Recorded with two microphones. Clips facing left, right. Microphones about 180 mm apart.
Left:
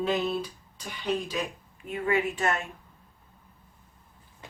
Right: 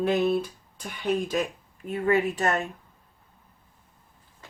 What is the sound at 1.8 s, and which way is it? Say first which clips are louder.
Speech: right 3 dB; 40° right (ahead or behind).